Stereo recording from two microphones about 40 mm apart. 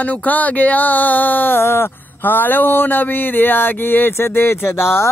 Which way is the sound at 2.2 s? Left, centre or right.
Left.